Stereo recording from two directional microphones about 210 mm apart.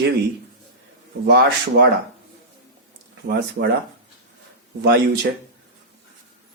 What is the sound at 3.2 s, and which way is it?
Speech, 50° right (ahead or behind).